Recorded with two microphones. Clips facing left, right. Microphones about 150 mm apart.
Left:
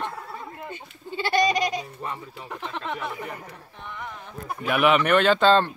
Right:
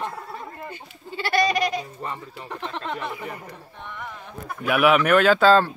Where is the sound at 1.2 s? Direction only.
20° left (ahead or behind).